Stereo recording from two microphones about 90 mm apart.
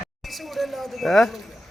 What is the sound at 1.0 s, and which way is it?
Speech, 5° left (ahead or behind).